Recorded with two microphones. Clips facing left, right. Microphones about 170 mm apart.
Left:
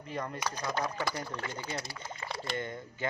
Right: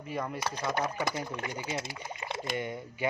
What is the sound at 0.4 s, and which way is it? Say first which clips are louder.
Speech: right 2 dB; 25° right (ahead or behind).